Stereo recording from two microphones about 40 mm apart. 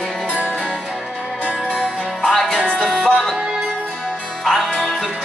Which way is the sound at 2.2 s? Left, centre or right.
Centre.